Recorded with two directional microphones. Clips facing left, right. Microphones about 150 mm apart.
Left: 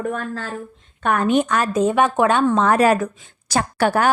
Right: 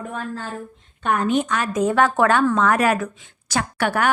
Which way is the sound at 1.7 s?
20° left (ahead or behind).